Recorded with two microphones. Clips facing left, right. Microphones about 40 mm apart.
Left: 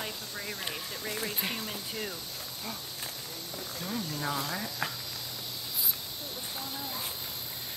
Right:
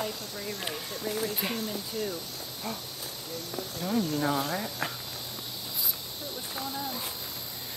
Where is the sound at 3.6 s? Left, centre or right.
Right.